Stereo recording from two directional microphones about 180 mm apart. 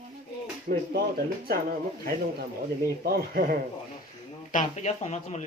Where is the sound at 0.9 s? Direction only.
60° right (ahead or behind).